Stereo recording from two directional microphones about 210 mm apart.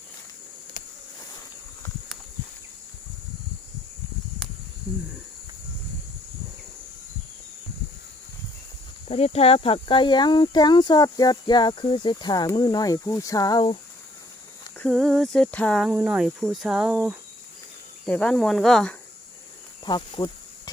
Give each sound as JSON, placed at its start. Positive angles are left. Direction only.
{"t": 9.0, "sound": "speech", "side_deg": 30}
{"t": 14.8, "sound": "speech", "side_deg": 0}
{"t": 19.8, "sound": "speech", "side_deg": 20}